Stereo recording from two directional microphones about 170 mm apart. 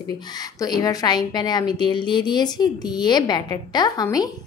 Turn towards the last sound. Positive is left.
turn(degrees=25)  # may be behind; listen again after turning